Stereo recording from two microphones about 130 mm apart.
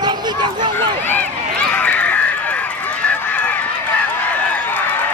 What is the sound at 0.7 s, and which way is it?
Run, 15° left (ahead or behind).